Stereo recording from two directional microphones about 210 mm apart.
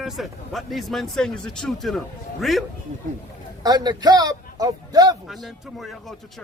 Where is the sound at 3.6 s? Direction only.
20° right (ahead or behind).